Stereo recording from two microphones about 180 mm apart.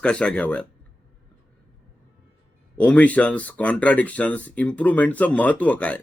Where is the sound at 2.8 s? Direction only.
10° left (ahead or behind).